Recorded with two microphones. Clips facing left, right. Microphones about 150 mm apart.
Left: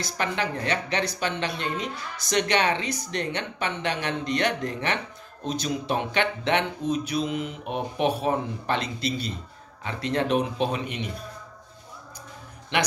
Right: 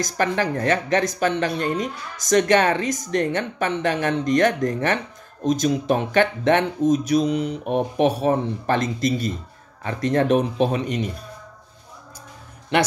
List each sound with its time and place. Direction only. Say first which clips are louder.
0.0 s speech: right 6 dB; 45° right (ahead or behind)